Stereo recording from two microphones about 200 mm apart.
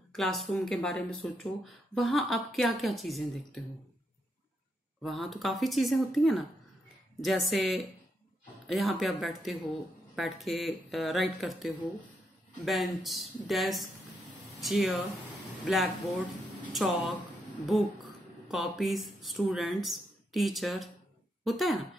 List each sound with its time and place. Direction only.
0.1 s speech: centre (ahead or behind)
5.0 s speech: centre (ahead or behind)
18.5 s speech: centre (ahead or behind)